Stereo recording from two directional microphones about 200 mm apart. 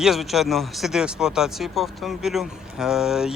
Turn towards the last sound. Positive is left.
turn(degrees=-5)  # may be behind; listen again after turning